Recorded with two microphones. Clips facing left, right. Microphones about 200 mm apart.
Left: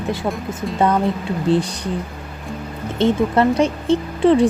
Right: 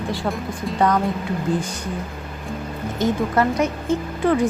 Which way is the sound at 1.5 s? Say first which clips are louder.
Left 5 dB; 35° left (ahead or behind).